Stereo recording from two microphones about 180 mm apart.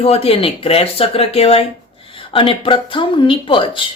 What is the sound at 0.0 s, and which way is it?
Speech, 35° left (ahead or behind).